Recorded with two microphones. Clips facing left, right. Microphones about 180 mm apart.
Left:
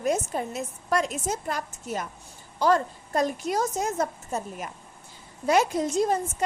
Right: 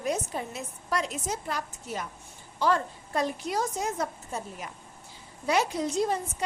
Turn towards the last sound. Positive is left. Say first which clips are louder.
# left 3 dB
turn(degrees=45)  # may be behind; listen again after turning